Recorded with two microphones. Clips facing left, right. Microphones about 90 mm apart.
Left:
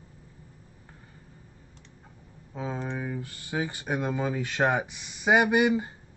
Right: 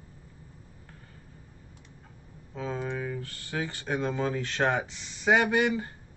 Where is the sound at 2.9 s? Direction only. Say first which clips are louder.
Even; 15° left (ahead or behind).